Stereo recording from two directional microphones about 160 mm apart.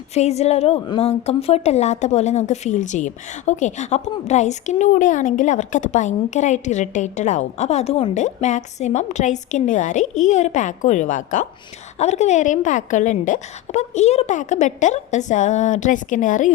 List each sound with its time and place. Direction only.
0.1 s a woman's voice: 40° left (ahead or behind)